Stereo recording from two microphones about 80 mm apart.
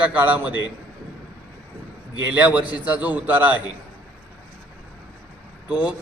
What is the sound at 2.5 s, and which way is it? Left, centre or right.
A man's voice, centre.